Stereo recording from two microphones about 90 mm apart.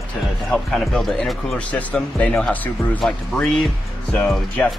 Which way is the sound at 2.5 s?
20° left (ahead or behind).